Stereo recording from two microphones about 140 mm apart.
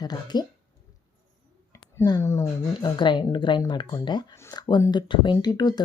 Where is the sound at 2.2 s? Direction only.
20° left (ahead or behind).